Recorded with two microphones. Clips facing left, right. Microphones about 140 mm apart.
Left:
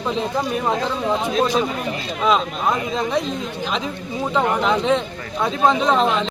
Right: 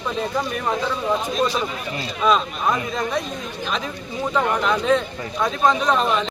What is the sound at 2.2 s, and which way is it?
Speech, 20° left (ahead or behind).